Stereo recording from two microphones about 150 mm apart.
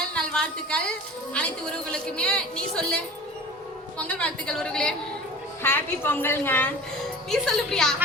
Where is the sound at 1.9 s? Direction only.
5° left (ahead or behind).